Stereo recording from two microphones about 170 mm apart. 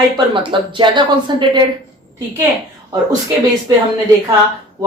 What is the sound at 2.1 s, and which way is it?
Speech, 15° right (ahead or behind).